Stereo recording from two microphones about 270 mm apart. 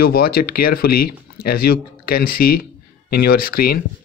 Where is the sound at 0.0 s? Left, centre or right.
Left.